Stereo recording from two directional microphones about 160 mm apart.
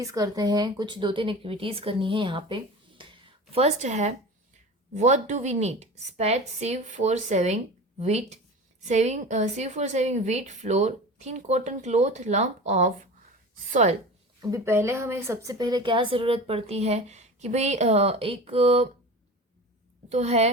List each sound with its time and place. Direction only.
0.0 s speech: 20° right (ahead or behind)
3.0 s a sound: 30° right (ahead or behind)
3.5 s a woman's voice: 45° right (ahead or behind)
14.5 s speech: 15° right (ahead or behind); by 18.9 s 40° right (ahead or behind)
20.1 s a woman's voice: 45° right (ahead or behind)